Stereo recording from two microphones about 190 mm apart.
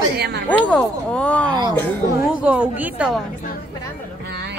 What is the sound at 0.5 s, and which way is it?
Speech, 5° left (ahead or behind).